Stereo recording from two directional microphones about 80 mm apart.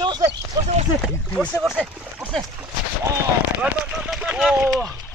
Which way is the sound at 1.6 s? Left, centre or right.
Centre.